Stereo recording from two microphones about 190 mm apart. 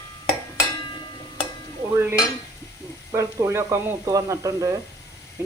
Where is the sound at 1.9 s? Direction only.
10° right (ahead or behind).